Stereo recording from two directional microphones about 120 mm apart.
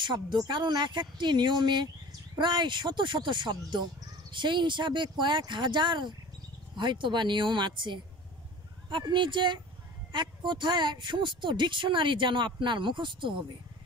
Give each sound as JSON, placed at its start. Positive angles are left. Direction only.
{"t": 0.0, "sound": "speech", "side_deg": -40}